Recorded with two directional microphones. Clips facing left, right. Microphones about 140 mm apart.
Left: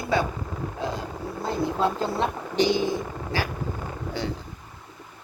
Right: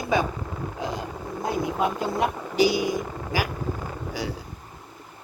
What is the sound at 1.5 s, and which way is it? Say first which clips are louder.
Speech: left 1 dB; 15° right (ahead or behind).